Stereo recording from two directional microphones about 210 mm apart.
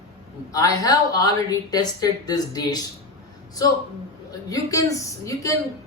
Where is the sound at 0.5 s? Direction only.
15° left (ahead or behind).